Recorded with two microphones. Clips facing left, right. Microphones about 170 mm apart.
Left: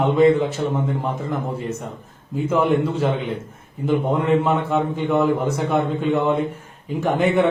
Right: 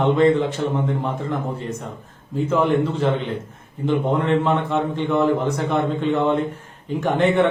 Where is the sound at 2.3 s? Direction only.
10° left (ahead or behind).